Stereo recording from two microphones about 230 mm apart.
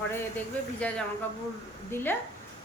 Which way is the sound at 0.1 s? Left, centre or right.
Centre.